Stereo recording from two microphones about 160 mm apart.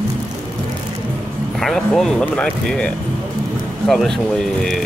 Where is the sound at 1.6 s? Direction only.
Centre (ahead or behind).